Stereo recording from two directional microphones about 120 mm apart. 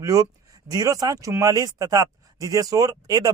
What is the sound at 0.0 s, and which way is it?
Speech, 30° right (ahead or behind).